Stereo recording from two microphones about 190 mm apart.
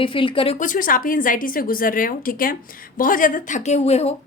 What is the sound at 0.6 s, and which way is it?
A woman's voice, 45° left (ahead or behind).